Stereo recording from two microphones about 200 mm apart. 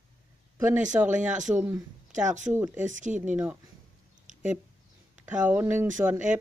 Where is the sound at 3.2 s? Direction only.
10° right (ahead or behind).